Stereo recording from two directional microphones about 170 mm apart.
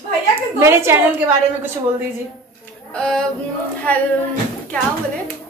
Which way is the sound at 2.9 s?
5° left (ahead or behind).